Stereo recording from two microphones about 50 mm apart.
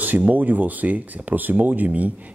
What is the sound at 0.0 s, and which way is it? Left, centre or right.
Speech, right.